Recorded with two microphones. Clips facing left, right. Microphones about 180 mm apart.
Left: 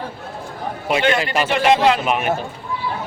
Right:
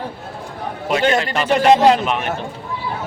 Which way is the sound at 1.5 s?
40° right (ahead or behind).